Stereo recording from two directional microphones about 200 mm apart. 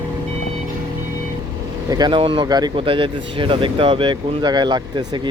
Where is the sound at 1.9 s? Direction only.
20° right (ahead or behind).